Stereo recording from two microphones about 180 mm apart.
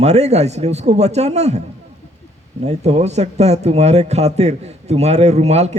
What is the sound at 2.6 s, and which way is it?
Speech, 35° right (ahead or behind).